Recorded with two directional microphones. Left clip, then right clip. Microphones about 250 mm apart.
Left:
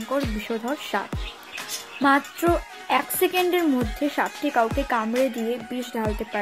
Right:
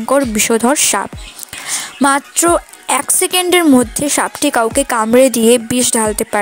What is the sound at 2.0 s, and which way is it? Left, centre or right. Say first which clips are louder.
A woman's voice: right 7 dB; right.